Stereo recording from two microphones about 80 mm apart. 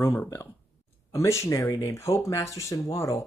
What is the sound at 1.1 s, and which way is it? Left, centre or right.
Speech, left.